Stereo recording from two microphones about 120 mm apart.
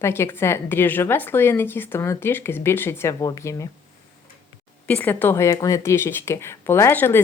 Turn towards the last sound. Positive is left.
turn(degrees=20)  # may be behind; listen again after turning